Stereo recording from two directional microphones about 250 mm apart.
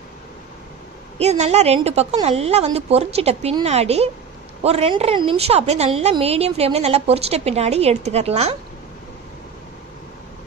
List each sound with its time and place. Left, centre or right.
1.1 s a woman's voice: right